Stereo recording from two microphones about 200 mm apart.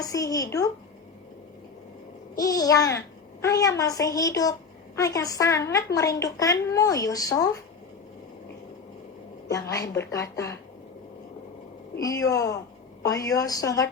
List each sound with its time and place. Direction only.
0.0 s a woman's voice: 15° left (ahead or behind)
2.3 s a woman's voice: 20° left (ahead or behind)
9.5 s a woman's voice: 15° left (ahead or behind)
11.9 s a woman's voice: 15° left (ahead or behind)